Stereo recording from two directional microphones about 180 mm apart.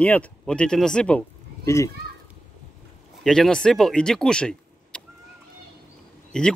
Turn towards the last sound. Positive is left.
turn(degrees=5)  # may be behind; listen again after turning